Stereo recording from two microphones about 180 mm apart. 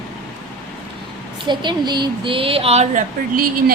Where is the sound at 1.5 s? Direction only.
25° right (ahead or behind).